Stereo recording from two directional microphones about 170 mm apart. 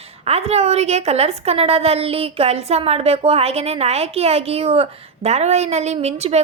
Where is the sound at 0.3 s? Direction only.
40° right (ahead or behind).